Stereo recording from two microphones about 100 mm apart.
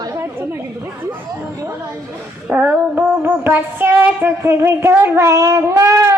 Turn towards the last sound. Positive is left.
turn(degrees=-30)  # may be behind; listen again after turning